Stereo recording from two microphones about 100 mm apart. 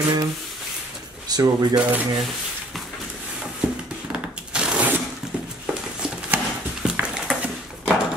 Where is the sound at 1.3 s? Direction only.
40° right (ahead or behind).